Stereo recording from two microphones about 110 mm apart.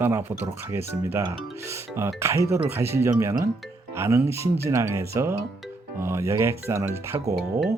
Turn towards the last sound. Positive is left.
turn(degrees=-5)  # may be behind; listen again after turning